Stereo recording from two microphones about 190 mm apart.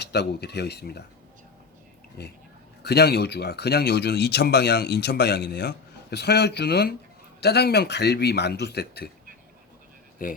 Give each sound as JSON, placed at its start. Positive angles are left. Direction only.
{"t": 0.0, "sound": "speech", "side_deg": 60}
{"t": 2.2, "sound": "speech", "side_deg": 60}
{"t": 10.2, "sound": "speech", "side_deg": 50}